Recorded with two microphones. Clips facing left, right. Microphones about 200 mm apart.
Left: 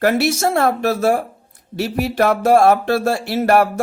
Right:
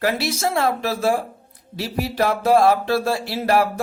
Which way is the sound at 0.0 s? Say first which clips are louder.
Left 6 dB; 50° left (ahead or behind).